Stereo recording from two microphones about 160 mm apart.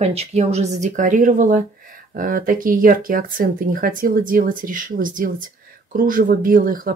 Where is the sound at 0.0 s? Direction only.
40° right (ahead or behind).